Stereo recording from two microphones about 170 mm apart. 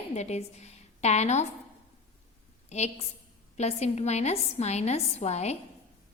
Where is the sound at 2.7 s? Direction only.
40° left (ahead or behind).